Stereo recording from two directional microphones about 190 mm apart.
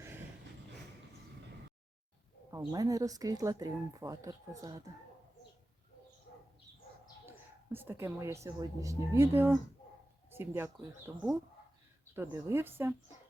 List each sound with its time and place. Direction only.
2.5 s speech: 20° right (ahead or behind)
7.3 s a woman's voice: 10° right (ahead or behind)